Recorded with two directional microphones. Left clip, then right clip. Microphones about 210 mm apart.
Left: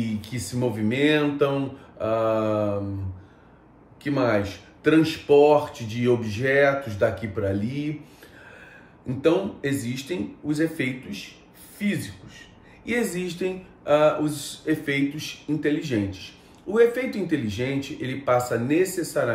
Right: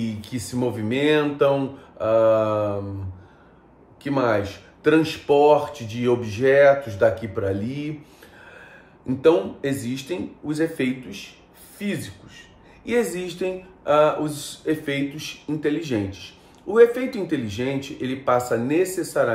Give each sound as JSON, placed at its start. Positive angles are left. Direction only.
{"t": 0.0, "sound": "speech", "side_deg": -15}
{"t": 4.0, "sound": "speech", "side_deg": -15}
{"t": 9.0, "sound": "speech", "side_deg": -15}